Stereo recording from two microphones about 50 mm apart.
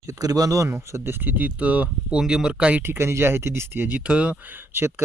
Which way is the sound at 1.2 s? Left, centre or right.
Right.